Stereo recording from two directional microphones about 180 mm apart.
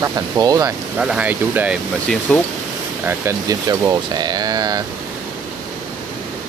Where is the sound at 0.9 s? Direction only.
5° right (ahead or behind).